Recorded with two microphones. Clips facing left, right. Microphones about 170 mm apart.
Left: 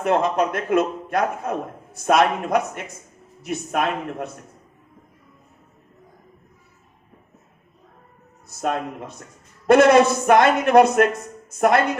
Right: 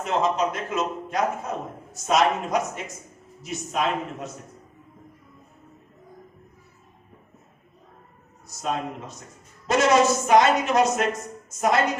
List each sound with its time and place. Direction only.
0.0 s a man's voice: 60° left (ahead or behind)
8.4 s a man's voice: 55° left (ahead or behind)